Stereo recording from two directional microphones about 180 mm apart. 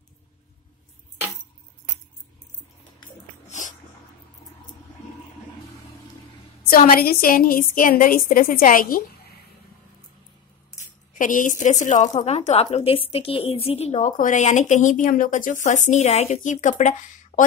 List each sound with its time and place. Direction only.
3.4 s dog: 40° left (ahead or behind)
6.7 s speech: 55° left (ahead or behind)
11.1 s speech: 45° left (ahead or behind)